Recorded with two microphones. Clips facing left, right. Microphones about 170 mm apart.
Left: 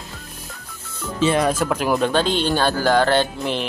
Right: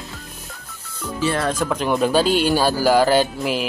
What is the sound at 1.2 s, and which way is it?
Speech, 20° left (ahead or behind).